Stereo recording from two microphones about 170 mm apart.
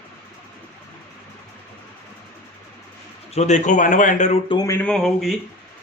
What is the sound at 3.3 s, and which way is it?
Speech, 40° left (ahead or behind).